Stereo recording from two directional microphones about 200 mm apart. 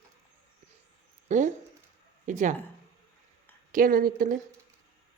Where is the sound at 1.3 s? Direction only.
40° right (ahead or behind).